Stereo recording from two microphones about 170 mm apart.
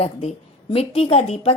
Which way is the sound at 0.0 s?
35° left (ahead or behind).